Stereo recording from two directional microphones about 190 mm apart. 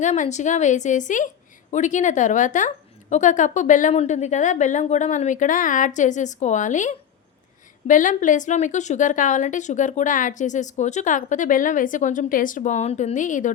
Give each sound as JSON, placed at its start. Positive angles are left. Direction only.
{"t": 0.0, "sound": "a woman's voice", "side_deg": 40}